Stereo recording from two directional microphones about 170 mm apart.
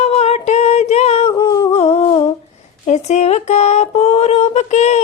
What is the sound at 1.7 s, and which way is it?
Humming, 40° left (ahead or behind).